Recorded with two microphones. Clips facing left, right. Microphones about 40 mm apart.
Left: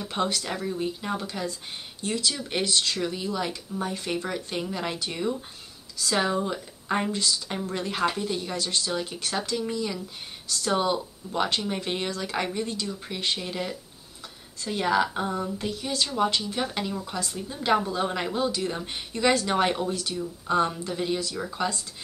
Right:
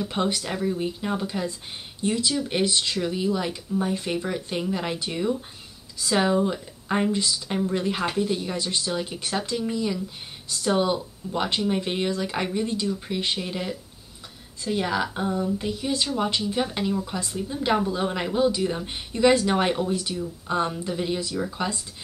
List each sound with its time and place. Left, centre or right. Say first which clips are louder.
0.1 s speech: right 2 dB; centre
1.4 s speech: right 2 dB; right
2.3 s a woman's voice: right 3 dB; centre
15.7 s speech: right 3 dB; centre
16.6 s a woman's voice: right 3 dB; centre
19.1 s speech: right 4 dB; right
19.4 s a woman's voice: right 2 dB; centre
19.9 s speech: right 3 dB; centre
20.2 s a woman's voice: left 1 dB; centre
21.6 s speech: left 2 dB; centre